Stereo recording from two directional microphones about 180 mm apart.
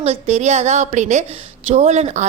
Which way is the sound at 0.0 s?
35° right (ahead or behind).